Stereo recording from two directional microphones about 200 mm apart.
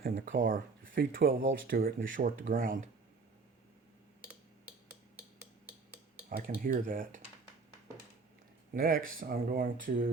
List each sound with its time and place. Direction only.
0.0 s speech: 45° right (ahead or behind)
6.2 s speech: 45° right (ahead or behind)
8.7 s speech: 45° right (ahead or behind)